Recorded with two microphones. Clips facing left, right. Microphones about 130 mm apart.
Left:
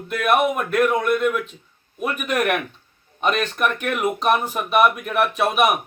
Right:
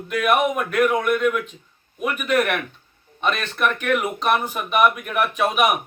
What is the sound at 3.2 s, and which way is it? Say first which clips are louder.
Speech: left 2 dB; 45° left (ahead or behind).